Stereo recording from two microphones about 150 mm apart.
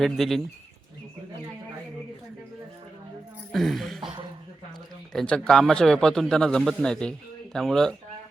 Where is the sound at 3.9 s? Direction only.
30° right (ahead or behind).